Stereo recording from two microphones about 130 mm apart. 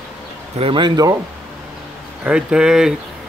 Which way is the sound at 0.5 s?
40° right (ahead or behind).